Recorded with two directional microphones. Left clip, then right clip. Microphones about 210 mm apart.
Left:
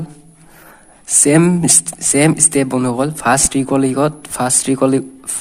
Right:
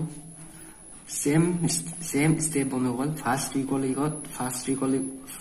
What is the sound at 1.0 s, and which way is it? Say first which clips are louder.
Speech: left 13 dB; 50° left (ahead or behind).